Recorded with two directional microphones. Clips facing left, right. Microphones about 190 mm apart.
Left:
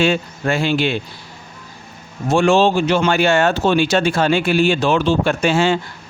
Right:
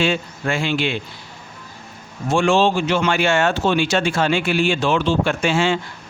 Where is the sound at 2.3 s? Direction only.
40° left (ahead or behind).